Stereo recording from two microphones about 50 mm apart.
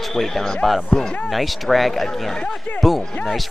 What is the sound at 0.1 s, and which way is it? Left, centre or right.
Speech, centre.